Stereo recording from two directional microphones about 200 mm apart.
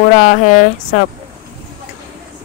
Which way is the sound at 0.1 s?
40° left (ahead or behind).